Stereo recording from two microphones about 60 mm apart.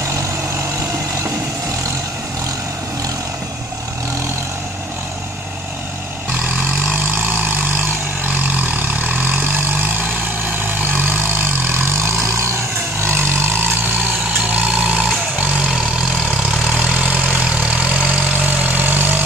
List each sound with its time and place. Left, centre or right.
0.0 s vehicle: right
7.1 s vehicle: right
12.4 s vehicle: right
14.3 s vehicle: right